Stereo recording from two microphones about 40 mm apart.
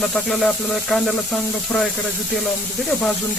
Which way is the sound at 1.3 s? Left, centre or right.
Centre.